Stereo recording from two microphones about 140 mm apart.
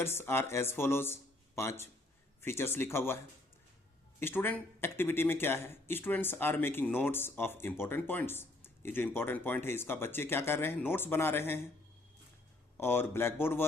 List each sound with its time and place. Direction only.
0.0 s speech: 15° left (ahead or behind)
4.2 s speech: 15° left (ahead or behind)
12.7 s speech: 15° left (ahead or behind)